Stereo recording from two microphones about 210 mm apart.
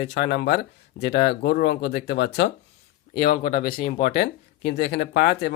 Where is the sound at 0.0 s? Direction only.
55° left (ahead or behind).